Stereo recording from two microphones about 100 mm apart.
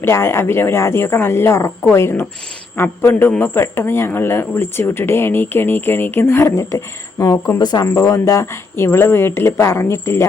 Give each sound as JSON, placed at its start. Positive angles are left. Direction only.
{"t": 0.0, "sound": "speech", "side_deg": 25}
{"t": 7.9, "sound": "speech", "side_deg": 30}